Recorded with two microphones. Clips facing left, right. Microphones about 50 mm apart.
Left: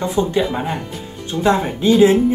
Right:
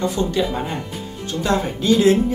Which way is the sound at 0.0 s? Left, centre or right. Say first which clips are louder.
Left 2 dB; centre.